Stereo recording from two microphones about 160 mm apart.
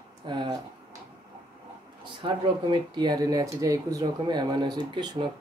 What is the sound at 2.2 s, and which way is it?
Speech, 30° right (ahead or behind).